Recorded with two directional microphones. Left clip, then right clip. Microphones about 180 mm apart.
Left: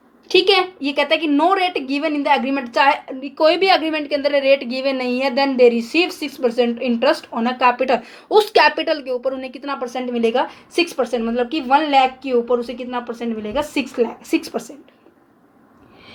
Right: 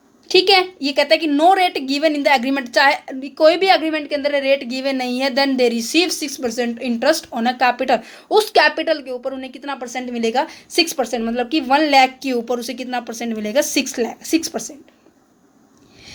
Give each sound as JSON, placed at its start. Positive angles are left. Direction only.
{"t": 0.3, "sound": "a woman's voice", "side_deg": -20}
{"t": 4.4, "sound": "speech", "side_deg": -90}
{"t": 4.6, "sound": "speech", "side_deg": -15}